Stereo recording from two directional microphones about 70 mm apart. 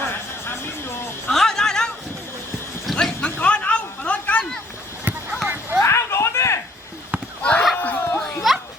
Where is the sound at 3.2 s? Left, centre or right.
Centre.